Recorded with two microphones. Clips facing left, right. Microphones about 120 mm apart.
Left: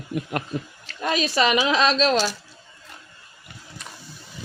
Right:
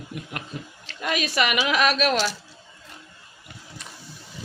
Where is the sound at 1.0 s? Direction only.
30° left (ahead or behind).